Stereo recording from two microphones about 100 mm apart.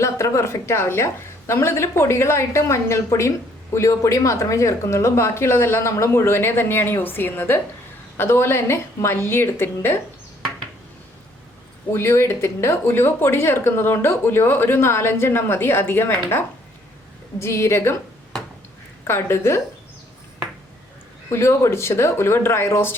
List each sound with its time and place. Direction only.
0.0 s a woman's voice: 30° left (ahead or behind)
11.9 s a woman's voice: 25° left (ahead or behind)
17.4 s a woman's voice: 25° left (ahead or behind)
19.0 s a woman's voice: 25° left (ahead or behind)
21.2 s a woman's voice: 30° left (ahead or behind)